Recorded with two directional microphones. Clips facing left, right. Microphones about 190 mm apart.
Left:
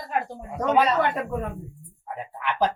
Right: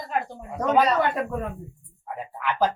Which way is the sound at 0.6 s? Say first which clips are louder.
Even; centre (ahead or behind).